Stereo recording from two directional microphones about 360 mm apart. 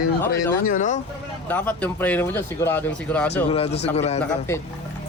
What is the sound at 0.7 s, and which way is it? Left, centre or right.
Speech, left.